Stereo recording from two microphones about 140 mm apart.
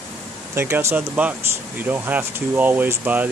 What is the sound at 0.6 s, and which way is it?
Speech, 20° right (ahead or behind).